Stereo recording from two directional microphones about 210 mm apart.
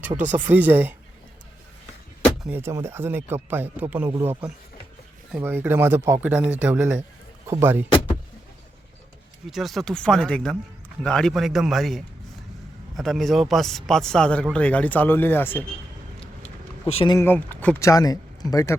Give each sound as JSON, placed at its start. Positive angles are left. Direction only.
{"t": 0.3, "sound": "speech", "side_deg": -10}
{"t": 2.4, "sound": "speech", "side_deg": -10}
{"t": 7.9, "sound": "vehicle", "side_deg": 30}
{"t": 9.5, "sound": "speech", "side_deg": 0}
{"t": 16.2, "sound": "a sound", "side_deg": 30}
{"t": 17.2, "sound": "speech", "side_deg": 10}